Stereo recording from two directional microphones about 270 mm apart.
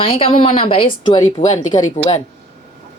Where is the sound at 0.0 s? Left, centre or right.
Centre.